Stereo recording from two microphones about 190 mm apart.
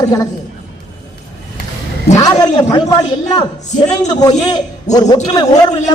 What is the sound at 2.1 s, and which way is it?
A man's voice, 20° left (ahead or behind).